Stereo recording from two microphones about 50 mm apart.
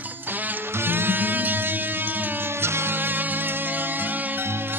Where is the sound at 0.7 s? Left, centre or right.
Right.